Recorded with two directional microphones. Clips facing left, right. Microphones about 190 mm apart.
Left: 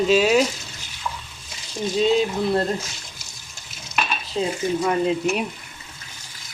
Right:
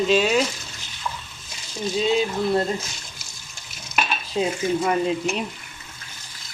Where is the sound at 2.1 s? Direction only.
Centre (ahead or behind).